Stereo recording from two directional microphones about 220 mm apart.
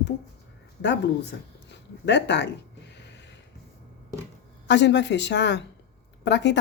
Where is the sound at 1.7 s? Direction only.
50° left (ahead or behind).